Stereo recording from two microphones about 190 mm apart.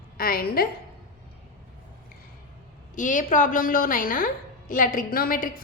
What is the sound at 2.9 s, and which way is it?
A woman's voice, 40° left (ahead or behind).